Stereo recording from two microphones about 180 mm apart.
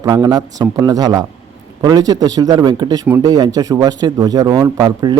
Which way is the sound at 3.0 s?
10° right (ahead or behind).